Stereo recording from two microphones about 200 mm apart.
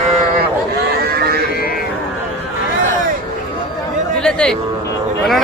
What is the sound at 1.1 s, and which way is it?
Livestock, 50° right (ahead or behind).